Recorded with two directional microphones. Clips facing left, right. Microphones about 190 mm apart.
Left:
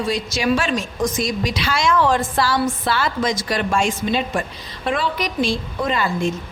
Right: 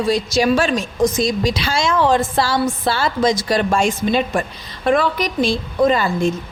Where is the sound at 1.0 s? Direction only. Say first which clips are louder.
Right 6 dB; 25° right (ahead or behind); by 5.4 s 45° right (ahead or behind).